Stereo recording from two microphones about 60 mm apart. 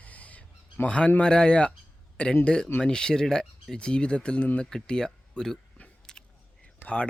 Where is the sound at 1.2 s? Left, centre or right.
Centre.